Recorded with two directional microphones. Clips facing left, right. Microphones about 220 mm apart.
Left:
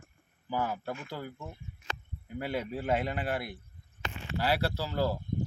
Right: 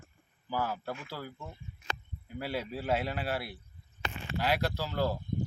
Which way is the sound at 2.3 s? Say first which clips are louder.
Left 2 dB; 5° right (ahead or behind).